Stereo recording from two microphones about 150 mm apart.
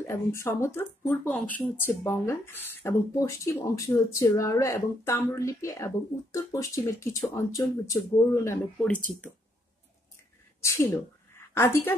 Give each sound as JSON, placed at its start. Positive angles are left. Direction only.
{"t": 0.0, "sound": "speech", "side_deg": 20}
{"t": 10.6, "sound": "a woman's voice", "side_deg": 20}